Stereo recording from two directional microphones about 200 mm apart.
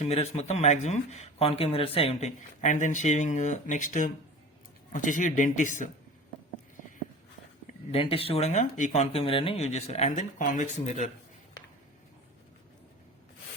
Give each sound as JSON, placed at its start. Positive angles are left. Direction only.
{"t": 0.0, "sound": "speech", "side_deg": 30}
{"t": 7.9, "sound": "speech", "side_deg": 30}